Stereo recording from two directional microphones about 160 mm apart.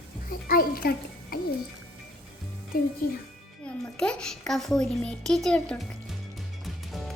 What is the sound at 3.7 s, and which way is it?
A child's voice, 5° left (ahead or behind).